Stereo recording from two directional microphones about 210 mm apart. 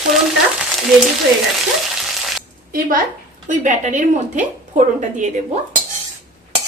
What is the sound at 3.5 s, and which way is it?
A woman's voice, 35° right (ahead or behind).